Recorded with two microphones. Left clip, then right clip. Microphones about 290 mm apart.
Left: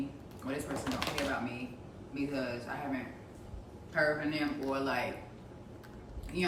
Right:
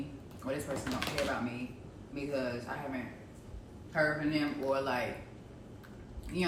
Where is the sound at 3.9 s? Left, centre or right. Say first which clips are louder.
Even; centre.